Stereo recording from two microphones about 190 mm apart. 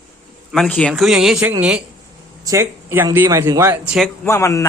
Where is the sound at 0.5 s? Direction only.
5° left (ahead or behind).